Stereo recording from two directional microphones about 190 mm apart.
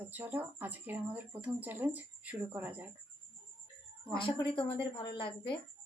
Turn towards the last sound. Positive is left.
turn(degrees=25)  # may be behind; listen again after turning